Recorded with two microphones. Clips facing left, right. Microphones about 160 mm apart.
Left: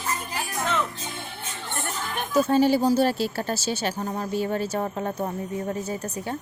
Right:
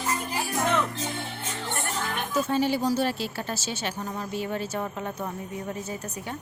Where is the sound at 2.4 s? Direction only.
40° left (ahead or behind).